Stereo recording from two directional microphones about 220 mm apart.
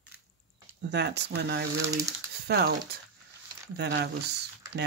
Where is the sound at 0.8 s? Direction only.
50° right (ahead or behind).